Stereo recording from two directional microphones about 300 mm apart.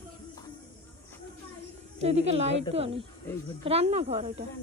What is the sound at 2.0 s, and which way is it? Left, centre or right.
Speech, right.